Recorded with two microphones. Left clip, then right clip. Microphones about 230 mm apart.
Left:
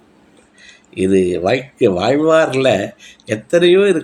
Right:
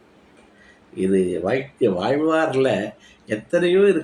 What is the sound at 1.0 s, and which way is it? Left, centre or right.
Speech, left.